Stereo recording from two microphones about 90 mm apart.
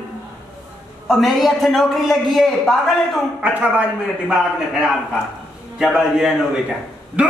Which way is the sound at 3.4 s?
15° right (ahead or behind).